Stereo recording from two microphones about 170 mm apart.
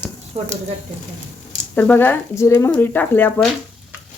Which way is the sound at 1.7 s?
10° left (ahead or behind).